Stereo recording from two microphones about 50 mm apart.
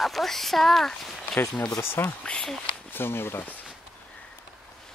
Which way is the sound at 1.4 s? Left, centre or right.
Left.